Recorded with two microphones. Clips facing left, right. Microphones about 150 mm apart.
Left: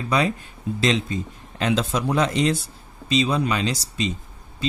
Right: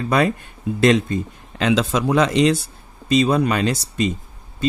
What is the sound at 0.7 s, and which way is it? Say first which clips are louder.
Speech: right 7 dB; 55° right (ahead or behind).